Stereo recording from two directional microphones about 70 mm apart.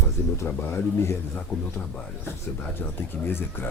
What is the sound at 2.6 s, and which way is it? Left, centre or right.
Speech, left.